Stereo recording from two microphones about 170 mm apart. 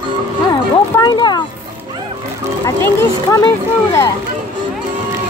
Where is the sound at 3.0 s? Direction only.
20° left (ahead or behind).